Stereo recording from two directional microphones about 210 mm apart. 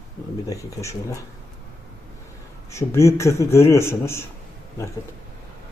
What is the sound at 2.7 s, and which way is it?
Speech, 15° left (ahead or behind).